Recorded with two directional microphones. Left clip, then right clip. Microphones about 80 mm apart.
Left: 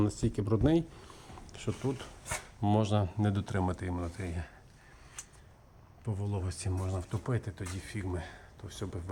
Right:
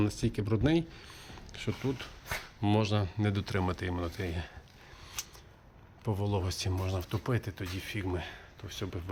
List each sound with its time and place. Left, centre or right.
0.0 s speech: left
2.6 s speech: left
3.2 s speech: left
3.6 s speech: centre
3.9 s speech: centre
5.2 s a sound: right
6.1 s speech: right
6.5 s speech: centre